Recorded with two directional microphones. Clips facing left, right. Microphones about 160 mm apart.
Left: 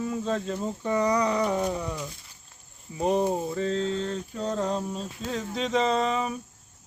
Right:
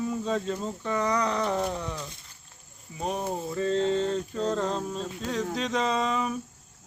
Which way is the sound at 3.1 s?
25° left (ahead or behind).